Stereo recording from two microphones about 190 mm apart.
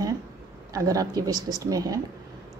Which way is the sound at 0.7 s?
20° right (ahead or behind).